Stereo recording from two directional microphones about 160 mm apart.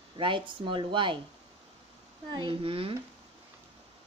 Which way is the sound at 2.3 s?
30° right (ahead or behind).